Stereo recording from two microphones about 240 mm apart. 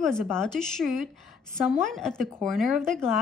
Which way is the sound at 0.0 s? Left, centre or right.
Centre.